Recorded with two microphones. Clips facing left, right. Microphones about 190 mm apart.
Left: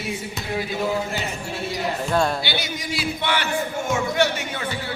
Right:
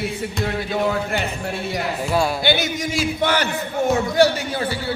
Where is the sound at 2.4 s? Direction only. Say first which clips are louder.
Right 7 dB; 50° right (ahead or behind).